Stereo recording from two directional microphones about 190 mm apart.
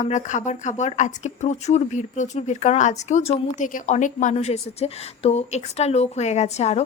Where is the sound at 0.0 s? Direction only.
40° left (ahead or behind).